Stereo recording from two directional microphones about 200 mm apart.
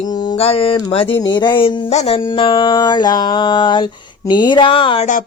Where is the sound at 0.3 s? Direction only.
30° left (ahead or behind).